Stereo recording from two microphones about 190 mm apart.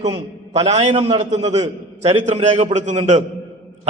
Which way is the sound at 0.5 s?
35° right (ahead or behind).